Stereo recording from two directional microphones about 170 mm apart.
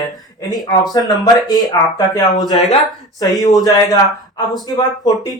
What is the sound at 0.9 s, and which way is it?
Speech, 25° left (ahead or behind).